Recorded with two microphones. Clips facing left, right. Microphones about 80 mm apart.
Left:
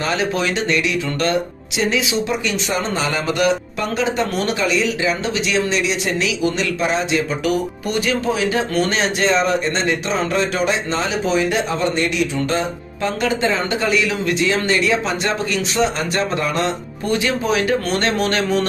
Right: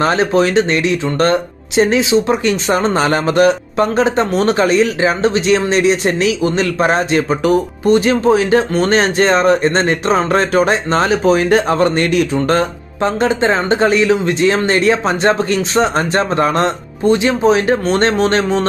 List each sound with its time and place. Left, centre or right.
0.0 s speech: right
4.3 s speech: right
4.6 s speech: right
7.8 s speech: right
13.0 s speech: right
17.0 s speech: right